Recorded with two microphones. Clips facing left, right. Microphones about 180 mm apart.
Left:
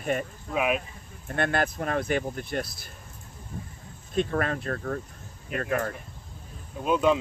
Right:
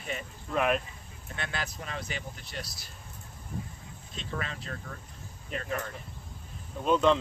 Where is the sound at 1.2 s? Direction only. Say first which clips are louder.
Left 11 dB; 55° left (ahead or behind).